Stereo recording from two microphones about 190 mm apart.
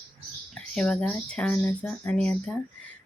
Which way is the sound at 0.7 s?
5° left (ahead or behind).